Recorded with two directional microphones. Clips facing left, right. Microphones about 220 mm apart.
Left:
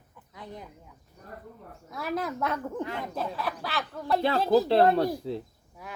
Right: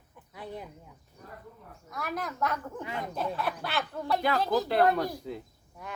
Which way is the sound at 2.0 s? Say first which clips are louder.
Left 3 dB; 25° left (ahead or behind).